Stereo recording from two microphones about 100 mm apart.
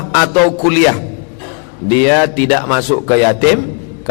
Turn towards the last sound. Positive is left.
turn(degrees=15)  # may be behind; listen again after turning